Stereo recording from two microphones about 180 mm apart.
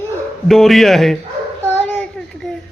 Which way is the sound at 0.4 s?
Centre (ahead or behind).